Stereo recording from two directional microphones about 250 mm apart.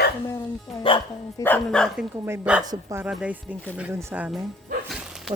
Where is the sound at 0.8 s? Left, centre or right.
Centre.